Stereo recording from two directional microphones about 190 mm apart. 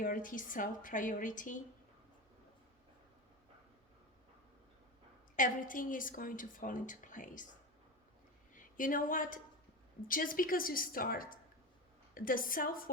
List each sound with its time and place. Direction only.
0.0 s a woman's voice: 45° left (ahead or behind)
5.4 s a woman's voice: 45° left (ahead or behind)
8.5 s a woman's voice: 45° left (ahead or behind)